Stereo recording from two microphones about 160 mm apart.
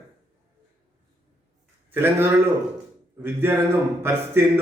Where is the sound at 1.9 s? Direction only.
15° right (ahead or behind).